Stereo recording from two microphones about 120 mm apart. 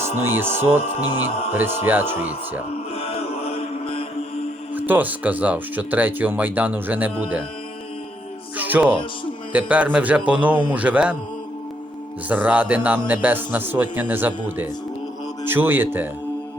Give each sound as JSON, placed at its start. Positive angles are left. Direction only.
{"t": 0.2, "sound": "speech", "side_deg": -20}
{"t": 2.9, "sound": "music", "side_deg": 55}
{"t": 4.7, "sound": "speech", "side_deg": -15}
{"t": 8.5, "sound": "music", "side_deg": -15}
{"t": 9.5, "sound": "speech", "side_deg": -10}
{"t": 12.3, "sound": "speech", "side_deg": -10}